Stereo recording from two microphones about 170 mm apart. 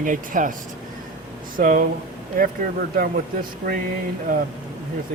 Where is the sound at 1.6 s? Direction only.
55° right (ahead or behind).